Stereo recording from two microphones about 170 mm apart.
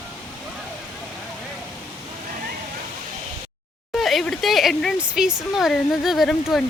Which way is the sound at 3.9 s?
Centre (ahead or behind).